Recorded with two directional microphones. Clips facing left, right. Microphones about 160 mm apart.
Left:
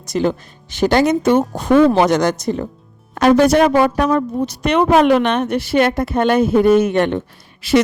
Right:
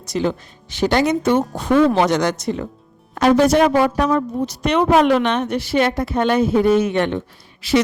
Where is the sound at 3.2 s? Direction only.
65° left (ahead or behind).